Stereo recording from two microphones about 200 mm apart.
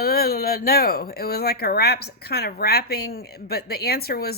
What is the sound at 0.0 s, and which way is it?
Speech, 50° left (ahead or behind).